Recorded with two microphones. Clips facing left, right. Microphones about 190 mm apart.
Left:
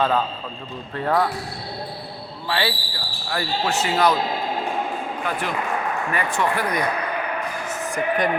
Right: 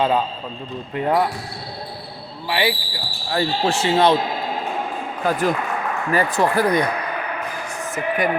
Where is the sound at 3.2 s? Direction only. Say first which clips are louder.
Right 4 dB; 30° right (ahead or behind).